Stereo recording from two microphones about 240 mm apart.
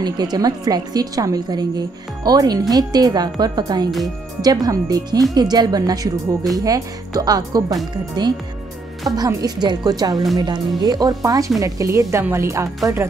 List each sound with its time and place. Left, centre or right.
0.0 s a woman's voice: centre